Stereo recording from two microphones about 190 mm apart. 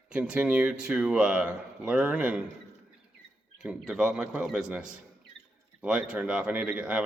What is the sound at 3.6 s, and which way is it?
Speech, 5° right (ahead or behind).